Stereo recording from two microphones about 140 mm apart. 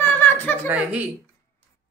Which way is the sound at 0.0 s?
15° left (ahead or behind).